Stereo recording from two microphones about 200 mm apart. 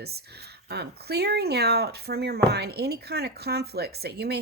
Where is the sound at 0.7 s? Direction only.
55° right (ahead or behind).